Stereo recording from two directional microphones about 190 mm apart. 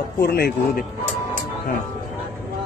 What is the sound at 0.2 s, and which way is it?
Speech, 55° left (ahead or behind).